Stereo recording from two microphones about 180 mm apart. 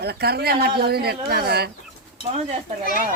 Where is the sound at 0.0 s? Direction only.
60° right (ahead or behind).